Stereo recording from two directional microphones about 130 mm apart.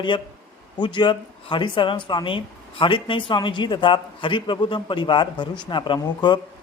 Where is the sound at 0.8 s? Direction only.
35° left (ahead or behind).